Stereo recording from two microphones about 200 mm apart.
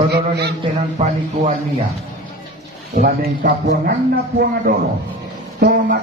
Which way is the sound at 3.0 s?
45° right (ahead or behind).